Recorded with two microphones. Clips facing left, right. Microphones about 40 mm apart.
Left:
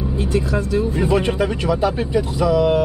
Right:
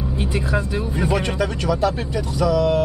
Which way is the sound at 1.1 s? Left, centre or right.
Centre.